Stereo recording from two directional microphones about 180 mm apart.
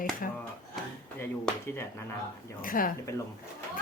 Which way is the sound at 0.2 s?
50° left (ahead or behind).